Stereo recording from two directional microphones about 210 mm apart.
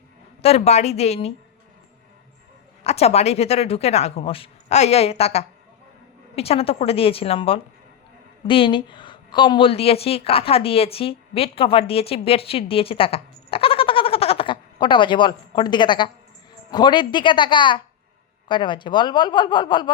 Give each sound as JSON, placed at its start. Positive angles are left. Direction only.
{"t": 0.4, "sound": "a woman's voice", "side_deg": 30}
{"t": 2.8, "sound": "a woman's voice", "side_deg": 30}